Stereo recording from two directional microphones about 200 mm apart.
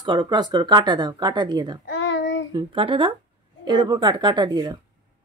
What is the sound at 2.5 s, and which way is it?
Speech, 25° right (ahead or behind).